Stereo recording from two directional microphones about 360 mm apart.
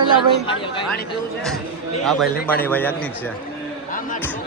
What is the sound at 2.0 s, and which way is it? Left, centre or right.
Speech, centre.